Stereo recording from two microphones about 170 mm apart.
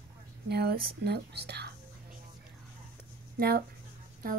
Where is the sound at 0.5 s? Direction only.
70° right (ahead or behind).